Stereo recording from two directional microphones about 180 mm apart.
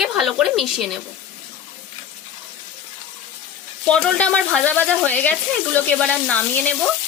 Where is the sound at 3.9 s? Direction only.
5° left (ahead or behind).